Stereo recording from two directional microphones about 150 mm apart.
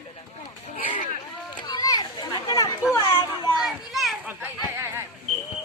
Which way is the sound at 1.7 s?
25° left (ahead or behind).